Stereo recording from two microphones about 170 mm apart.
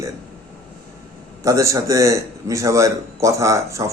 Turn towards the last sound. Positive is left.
turn(degrees=-15)  # may be behind; listen again after turning